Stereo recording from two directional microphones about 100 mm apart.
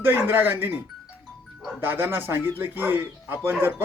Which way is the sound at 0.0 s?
20° right (ahead or behind).